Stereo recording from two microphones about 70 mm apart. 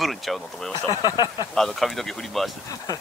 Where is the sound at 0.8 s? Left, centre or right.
Left.